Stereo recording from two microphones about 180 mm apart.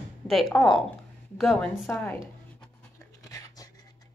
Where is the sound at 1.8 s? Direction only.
10° left (ahead or behind).